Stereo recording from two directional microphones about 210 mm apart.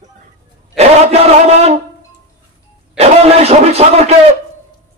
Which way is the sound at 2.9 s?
30° right (ahead or behind).